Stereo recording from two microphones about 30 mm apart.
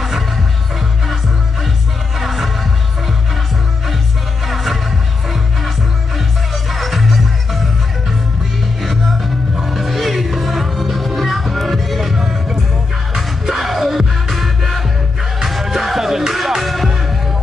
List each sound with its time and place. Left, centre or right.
2.1 s music: centre
6.1 s music: centre
9.6 s music: centre